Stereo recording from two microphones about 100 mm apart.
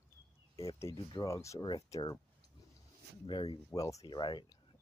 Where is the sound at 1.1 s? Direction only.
30° left (ahead or behind).